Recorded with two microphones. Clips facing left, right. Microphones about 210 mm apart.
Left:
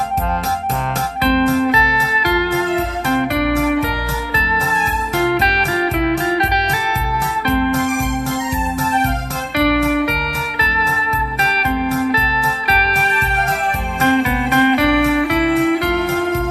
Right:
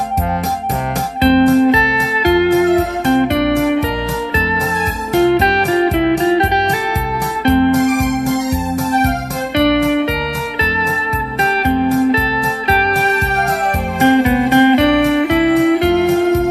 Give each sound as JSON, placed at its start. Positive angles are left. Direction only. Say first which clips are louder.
{"t": 1.2, "sound": "music", "louder": "right 6 dB", "side_deg": -25}
{"t": 5.1, "sound": "music", "louder": "right 6 dB", "side_deg": -25}
{"t": 7.4, "sound": "music", "louder": "right 6 dB", "side_deg": -25}
{"t": 7.8, "sound": "music", "louder": "right 5 dB", "side_deg": -40}
{"t": 9.6, "sound": "music", "louder": "right 2 dB", "side_deg": -25}
{"t": 11.6, "sound": "music", "louder": "right 5 dB", "side_deg": -25}
{"t": 14.1, "sound": "music", "louder": "right 5 dB", "side_deg": -20}